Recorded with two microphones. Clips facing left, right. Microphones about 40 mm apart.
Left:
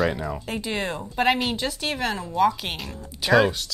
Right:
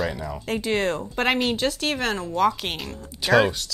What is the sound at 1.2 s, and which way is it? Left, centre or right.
Speech, centre.